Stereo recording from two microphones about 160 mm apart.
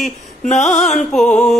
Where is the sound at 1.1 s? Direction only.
5° left (ahead or behind).